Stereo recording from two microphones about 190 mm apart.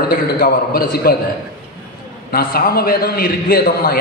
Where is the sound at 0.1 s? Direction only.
50° left (ahead or behind).